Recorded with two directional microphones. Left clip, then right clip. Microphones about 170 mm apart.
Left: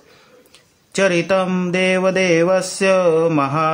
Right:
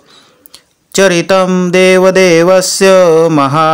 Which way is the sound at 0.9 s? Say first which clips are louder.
Right 8 dB; 40° right (ahead or behind).